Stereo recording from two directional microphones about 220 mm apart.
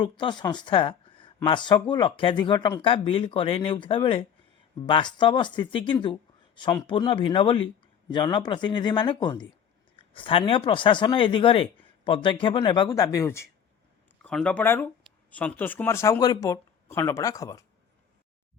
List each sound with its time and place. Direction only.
0.0 s speech: 20° left (ahead or behind)